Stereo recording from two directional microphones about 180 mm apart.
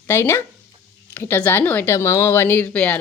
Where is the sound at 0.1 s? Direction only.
15° left (ahead or behind).